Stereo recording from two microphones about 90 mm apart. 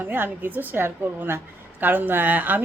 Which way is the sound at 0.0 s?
20° right (ahead or behind).